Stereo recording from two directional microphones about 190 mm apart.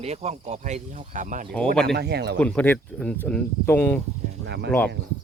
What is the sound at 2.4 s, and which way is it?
Speech, 5° left (ahead or behind).